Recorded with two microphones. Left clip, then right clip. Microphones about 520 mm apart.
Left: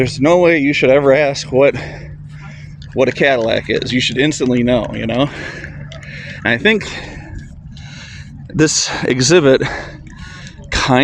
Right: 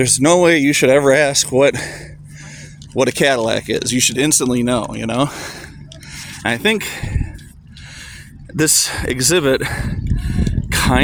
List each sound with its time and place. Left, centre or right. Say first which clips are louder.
0.0 s speech: left 1 dB; right
8.5 s speech: left 2 dB; right